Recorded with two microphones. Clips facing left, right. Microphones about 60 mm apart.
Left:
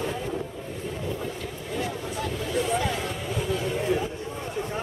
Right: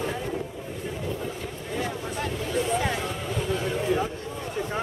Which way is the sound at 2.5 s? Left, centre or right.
Centre.